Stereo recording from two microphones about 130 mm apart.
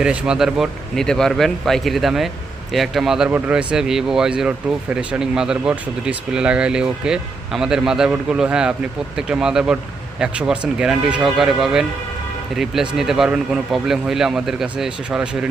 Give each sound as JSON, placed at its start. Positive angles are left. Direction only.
{"t": 0.0, "sound": "speech", "side_deg": -5}
{"t": 3.2, "sound": "speech", "side_deg": -15}